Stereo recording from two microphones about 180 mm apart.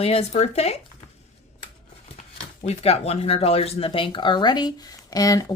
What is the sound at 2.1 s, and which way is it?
Speech, 35° left (ahead or behind).